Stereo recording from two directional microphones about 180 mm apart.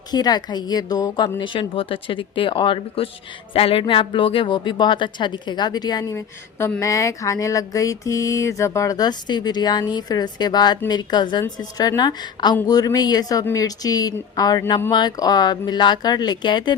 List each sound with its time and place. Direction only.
0.1 s speech: 20° left (ahead or behind)